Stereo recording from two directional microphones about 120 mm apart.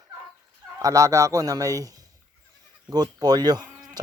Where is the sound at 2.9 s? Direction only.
35° right (ahead or behind).